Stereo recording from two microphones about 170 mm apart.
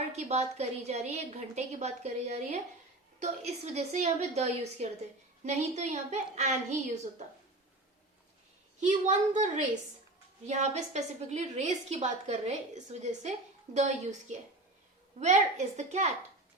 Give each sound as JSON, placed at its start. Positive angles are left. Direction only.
{"t": 0.1, "sound": "a woman's voice", "side_deg": -40}
{"t": 8.8, "sound": "a woman's voice", "side_deg": -45}